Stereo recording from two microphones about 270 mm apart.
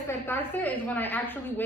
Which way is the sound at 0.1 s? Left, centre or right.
Centre.